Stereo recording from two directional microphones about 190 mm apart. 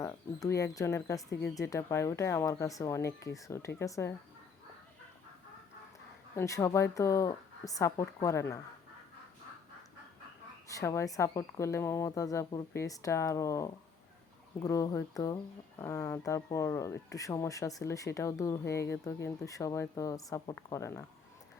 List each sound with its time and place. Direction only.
0.0 s speech: 15° left (ahead or behind)
6.3 s speech: 15° left (ahead or behind)
10.7 s speech: 15° left (ahead or behind)